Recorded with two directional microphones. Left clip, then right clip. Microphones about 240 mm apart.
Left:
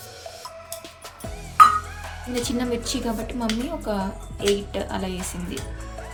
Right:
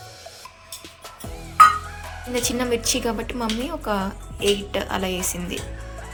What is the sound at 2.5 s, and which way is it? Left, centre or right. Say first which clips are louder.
A woman's voice: right 5 dB; centre.